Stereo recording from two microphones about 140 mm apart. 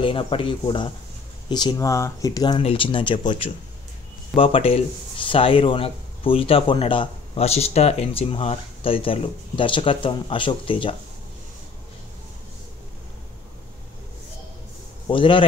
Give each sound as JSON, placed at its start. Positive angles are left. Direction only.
{"t": 0.0, "sound": "speech", "side_deg": 40}
{"t": 2.6, "sound": "speech", "side_deg": 40}
{"t": 15.0, "sound": "speech", "side_deg": 35}